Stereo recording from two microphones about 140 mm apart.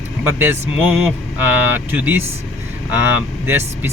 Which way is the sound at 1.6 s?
15° right (ahead or behind).